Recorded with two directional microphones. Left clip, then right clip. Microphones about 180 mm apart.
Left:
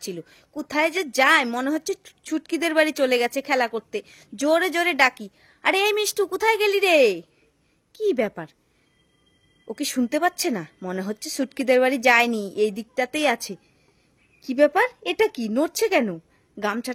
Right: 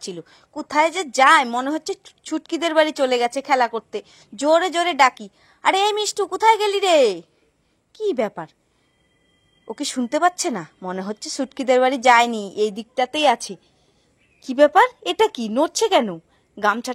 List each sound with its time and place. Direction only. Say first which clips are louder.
0.0 s a woman's voice: right 1 dB; 10° left (ahead or behind)
9.7 s a woman's voice: right 1 dB; 10° left (ahead or behind)